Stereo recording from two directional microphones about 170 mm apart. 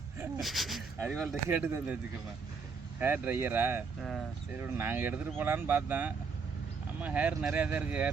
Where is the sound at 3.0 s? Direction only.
10° right (ahead or behind).